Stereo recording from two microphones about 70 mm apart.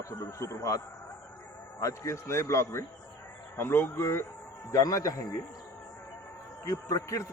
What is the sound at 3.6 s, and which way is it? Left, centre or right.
Speech, left.